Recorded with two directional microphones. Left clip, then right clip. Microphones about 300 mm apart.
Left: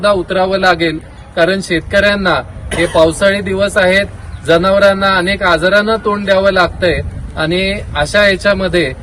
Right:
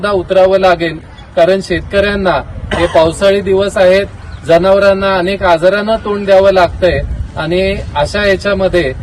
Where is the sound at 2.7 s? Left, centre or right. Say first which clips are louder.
Right 2 dB; right.